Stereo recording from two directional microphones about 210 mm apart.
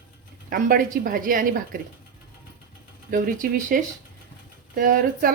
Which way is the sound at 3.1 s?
40° right (ahead or behind).